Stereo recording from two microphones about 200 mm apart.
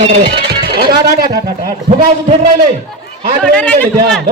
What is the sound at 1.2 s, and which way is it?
Speech, 50° right (ahead or behind).